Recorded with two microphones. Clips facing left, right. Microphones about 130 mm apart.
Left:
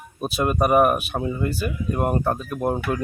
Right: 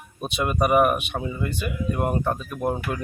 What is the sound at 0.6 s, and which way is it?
Speech, 35° left (ahead or behind).